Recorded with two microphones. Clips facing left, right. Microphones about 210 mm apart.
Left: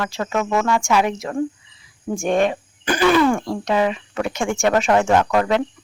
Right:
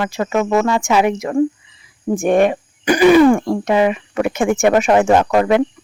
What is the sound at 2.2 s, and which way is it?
Cricket, 55° right (ahead or behind).